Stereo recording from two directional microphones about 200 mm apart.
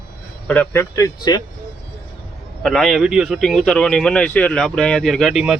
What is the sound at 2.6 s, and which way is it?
Speech, centre (ahead or behind).